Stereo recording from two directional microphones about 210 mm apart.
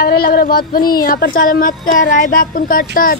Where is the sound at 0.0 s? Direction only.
45° left (ahead or behind).